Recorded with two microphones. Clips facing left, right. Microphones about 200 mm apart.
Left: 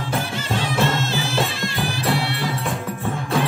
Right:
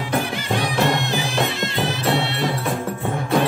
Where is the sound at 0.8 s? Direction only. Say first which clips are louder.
Right 1 dB; 15° right (ahead or behind).